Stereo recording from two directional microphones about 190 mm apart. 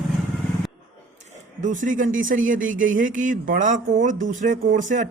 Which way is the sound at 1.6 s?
40° right (ahead or behind).